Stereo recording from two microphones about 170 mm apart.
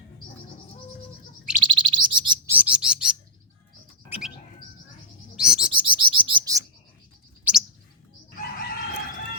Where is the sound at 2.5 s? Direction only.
5° right (ahead or behind).